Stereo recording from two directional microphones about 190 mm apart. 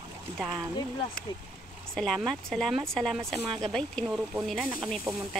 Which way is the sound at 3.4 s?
25° right (ahead or behind).